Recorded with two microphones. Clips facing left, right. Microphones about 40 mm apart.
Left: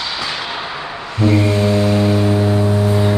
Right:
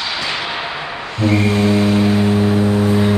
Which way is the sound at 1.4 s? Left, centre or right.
Centre.